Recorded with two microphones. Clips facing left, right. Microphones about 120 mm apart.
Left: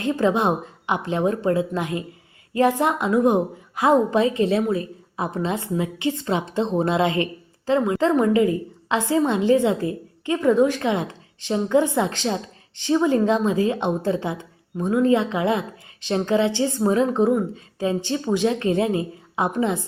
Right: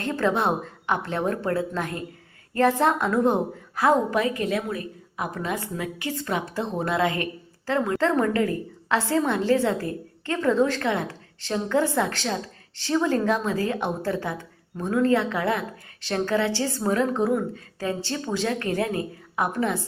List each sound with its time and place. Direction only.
0.0 s a woman's voice: 15° left (ahead or behind)